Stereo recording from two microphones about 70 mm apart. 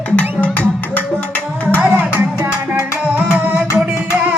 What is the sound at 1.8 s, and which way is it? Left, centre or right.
Music, right.